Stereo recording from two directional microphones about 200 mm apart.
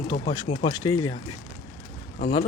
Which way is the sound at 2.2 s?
35° left (ahead or behind).